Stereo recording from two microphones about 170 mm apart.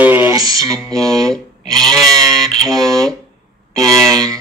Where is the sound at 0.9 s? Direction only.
20° right (ahead or behind).